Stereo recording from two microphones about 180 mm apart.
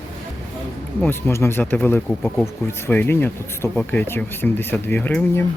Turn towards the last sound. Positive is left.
turn(degrees=10)  # may be behind; listen again after turning